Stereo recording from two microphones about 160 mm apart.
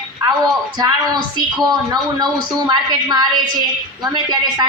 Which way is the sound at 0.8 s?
25° right (ahead or behind).